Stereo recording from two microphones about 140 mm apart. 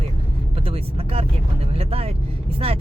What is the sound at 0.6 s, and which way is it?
Speech, 45° right (ahead or behind).